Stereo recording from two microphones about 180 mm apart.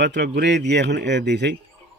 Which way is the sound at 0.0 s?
70° right (ahead or behind).